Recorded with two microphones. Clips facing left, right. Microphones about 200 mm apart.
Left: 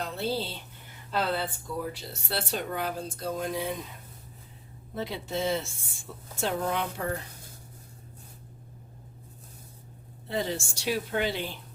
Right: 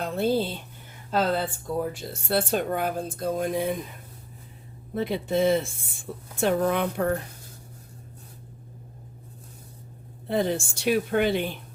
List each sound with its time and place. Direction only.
0.0 s a sound: 50° right (ahead or behind)
1.1 s speech: 45° right (ahead or behind)
4.9 s speech: 55° right (ahead or behind)
10.2 s speech: 55° right (ahead or behind)